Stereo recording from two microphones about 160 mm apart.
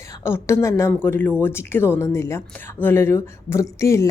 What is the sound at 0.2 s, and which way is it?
Speech, 15° left (ahead or behind).